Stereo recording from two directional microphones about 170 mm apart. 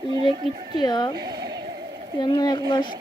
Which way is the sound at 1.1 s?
25° right (ahead or behind).